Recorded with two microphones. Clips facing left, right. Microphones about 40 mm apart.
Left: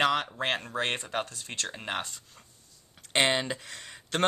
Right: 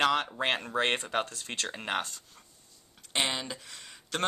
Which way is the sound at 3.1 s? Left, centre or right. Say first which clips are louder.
Left 6 dB; left.